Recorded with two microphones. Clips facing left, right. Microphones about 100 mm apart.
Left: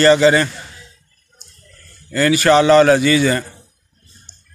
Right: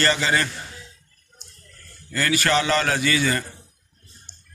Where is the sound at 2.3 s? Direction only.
25° left (ahead or behind).